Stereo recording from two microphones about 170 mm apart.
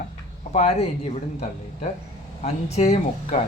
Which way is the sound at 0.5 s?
40° left (ahead or behind).